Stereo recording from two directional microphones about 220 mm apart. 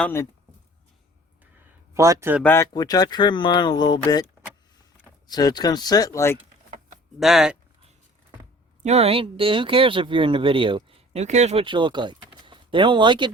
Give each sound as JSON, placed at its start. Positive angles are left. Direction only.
{"t": 0.0, "sound": "speech", "side_deg": 10}
{"t": 1.9, "sound": "speech", "side_deg": -15}
{"t": 2.4, "sound": "speech", "side_deg": 10}
{"t": 5.3, "sound": "speech", "side_deg": 20}
{"t": 7.2, "sound": "speech", "side_deg": 0}
{"t": 8.8, "sound": "speech", "side_deg": -30}